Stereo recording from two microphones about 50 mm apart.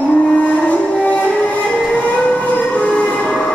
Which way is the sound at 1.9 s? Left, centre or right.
Left.